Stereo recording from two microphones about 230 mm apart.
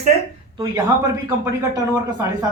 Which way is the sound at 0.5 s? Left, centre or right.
Centre.